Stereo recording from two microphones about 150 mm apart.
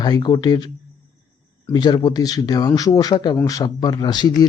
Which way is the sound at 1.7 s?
30° left (ahead or behind).